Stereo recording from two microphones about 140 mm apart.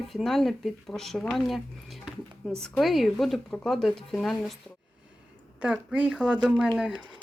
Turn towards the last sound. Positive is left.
turn(degrees=-5)  # may be behind; listen again after turning